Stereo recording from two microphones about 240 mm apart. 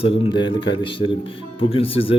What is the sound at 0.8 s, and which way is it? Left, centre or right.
Speech, left.